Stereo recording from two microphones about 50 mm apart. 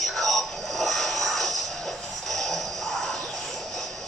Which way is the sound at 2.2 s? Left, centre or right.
Centre.